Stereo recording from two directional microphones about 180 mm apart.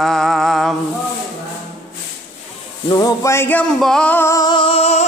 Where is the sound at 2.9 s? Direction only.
20° left (ahead or behind).